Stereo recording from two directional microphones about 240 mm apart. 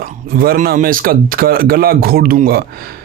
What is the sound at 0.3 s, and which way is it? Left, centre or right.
A man's voice, right.